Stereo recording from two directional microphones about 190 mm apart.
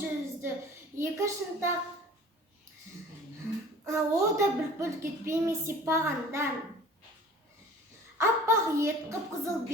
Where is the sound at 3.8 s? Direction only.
15° right (ahead or behind).